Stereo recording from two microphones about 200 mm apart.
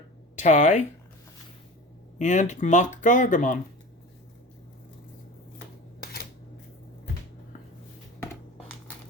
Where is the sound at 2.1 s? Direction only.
35° left (ahead or behind).